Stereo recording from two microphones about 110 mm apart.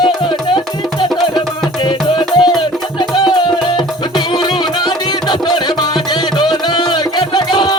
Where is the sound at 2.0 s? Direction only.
45° left (ahead or behind).